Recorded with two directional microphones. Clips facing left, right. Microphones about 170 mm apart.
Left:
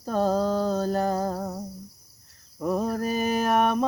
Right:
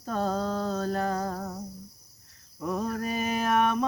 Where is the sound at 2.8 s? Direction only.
35° left (ahead or behind).